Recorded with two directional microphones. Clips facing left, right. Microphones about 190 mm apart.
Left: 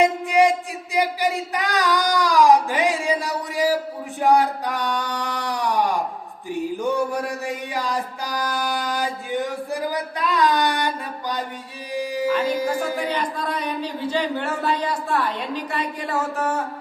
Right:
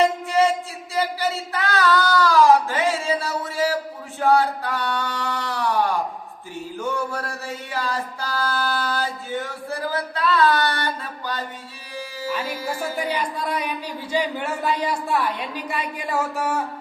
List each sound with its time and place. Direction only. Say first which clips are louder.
0.0 s music: left 2 dB; 15° left (ahead or behind)
0.9 s a sound: left 2 dB; 15° left (ahead or behind)
4.2 s male singing: left 1 dB; 15° left (ahead or behind)
6.5 s music: left 5 dB; 15° left (ahead or behind)
11.9 s speech: left 7 dB; 15° left (ahead or behind)
12.6 s a woman's voice: left 3 dB; 10° right (ahead or behind)